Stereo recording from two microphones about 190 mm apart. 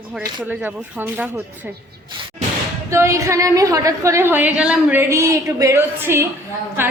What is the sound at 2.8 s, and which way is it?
A woman's voice, 15° right (ahead or behind).